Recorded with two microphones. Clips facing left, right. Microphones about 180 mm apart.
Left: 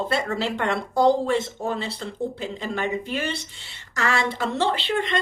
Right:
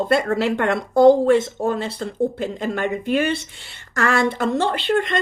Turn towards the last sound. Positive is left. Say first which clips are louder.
# right 4 dB
turn(degrees=-50)  # may be behind; listen again after turning